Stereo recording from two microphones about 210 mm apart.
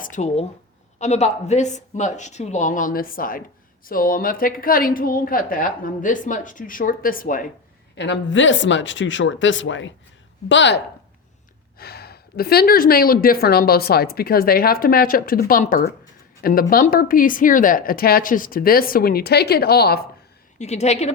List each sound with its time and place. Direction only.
0.0 s a woman's voice: 35° left (ahead or behind)
7.9 s speech: 55° left (ahead or behind)
11.8 s speech: 50° left (ahead or behind)
20.6 s a woman's voice: 30° left (ahead or behind)